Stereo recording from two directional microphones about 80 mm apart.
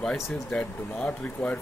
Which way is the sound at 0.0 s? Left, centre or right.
Centre.